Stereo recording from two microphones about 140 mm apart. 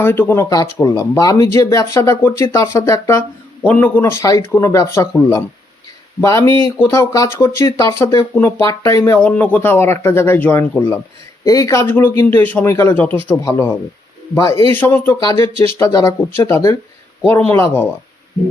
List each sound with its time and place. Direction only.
0.0 s speech: 15° left (ahead or behind)